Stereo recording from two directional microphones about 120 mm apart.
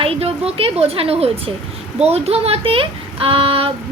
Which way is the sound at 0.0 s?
55° right (ahead or behind).